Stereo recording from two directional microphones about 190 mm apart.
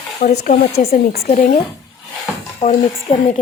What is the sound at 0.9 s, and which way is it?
Speech, 55° left (ahead or behind).